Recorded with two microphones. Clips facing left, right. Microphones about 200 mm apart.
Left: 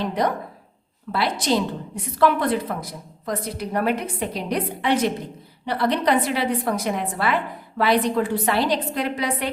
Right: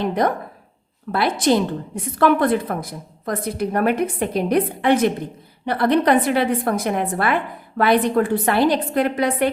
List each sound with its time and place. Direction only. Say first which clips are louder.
0.0 s a woman's voice: right 3 dB; 50° right (ahead or behind)